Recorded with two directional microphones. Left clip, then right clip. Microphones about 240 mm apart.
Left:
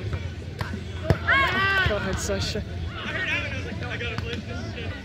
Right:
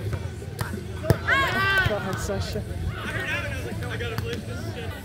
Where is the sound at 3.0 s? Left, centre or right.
Right.